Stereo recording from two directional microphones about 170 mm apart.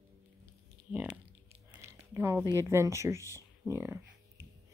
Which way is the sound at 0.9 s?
10° right (ahead or behind).